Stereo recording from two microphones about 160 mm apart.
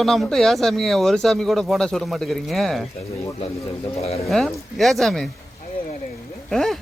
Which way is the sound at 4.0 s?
40° left (ahead or behind).